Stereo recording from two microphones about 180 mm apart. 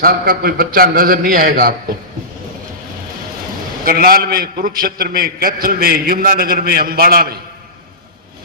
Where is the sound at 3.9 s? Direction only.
55° right (ahead or behind).